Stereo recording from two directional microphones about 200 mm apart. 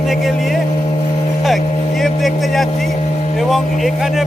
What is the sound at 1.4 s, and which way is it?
Vehicle, centre (ahead or behind).